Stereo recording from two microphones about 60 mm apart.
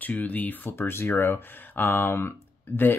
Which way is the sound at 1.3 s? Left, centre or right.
Left.